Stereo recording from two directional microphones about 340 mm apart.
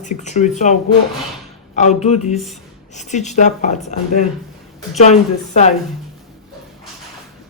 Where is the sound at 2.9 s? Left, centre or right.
Left.